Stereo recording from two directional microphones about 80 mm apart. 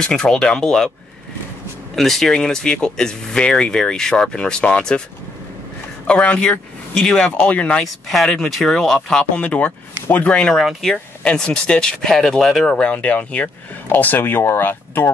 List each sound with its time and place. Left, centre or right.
0.0 s speech: centre
2.0 s speech: centre
6.0 s speech: centre
8.1 s speech: centre
10.5 s speech: centre
11.2 s speech: centre
12.8 s speech: centre